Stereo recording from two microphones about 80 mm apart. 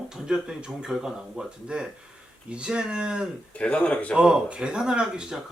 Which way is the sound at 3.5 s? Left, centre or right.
Centre.